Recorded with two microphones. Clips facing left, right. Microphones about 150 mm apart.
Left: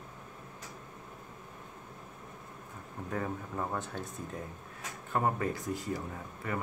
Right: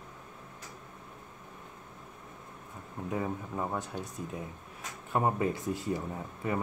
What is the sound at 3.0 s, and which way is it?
Speech, 15° right (ahead or behind).